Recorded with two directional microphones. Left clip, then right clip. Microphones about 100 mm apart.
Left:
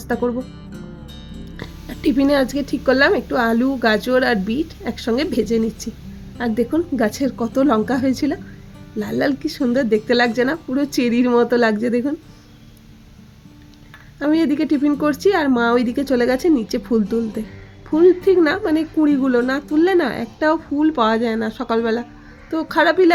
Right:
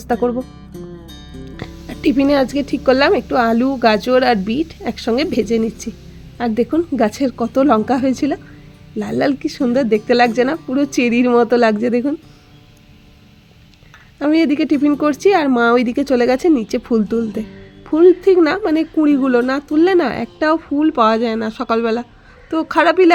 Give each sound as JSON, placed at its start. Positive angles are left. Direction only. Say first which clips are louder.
{"t": 0.1, "sound": "speech", "louder": "right 4 dB", "side_deg": -55}
{"t": 1.5, "sound": "a woman's voice", "louder": "right 2 dB", "side_deg": -55}
{"t": 14.2, "sound": "a woman's voice", "louder": "right 3 dB", "side_deg": -60}